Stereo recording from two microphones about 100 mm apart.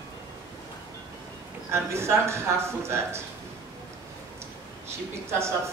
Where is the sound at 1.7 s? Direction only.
25° right (ahead or behind).